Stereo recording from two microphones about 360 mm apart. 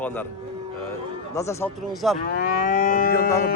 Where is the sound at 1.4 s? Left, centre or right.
Centre.